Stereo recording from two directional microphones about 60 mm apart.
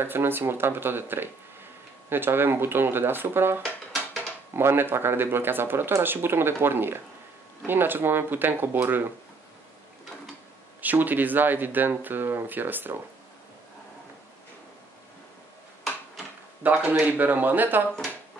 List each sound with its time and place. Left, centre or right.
0.0 s speech: right
10.8 s speech: right
16.6 s speech: right